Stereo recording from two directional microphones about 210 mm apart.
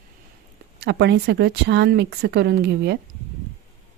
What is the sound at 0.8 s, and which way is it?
Speech, 55° right (ahead or behind).